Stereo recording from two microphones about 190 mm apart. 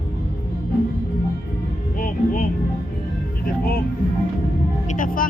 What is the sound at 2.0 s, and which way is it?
Speech, 45° left (ahead or behind).